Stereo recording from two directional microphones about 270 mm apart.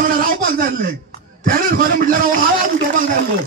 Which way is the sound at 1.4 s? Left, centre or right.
Right.